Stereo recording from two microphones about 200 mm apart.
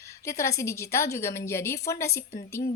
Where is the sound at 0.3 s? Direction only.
15° left (ahead or behind).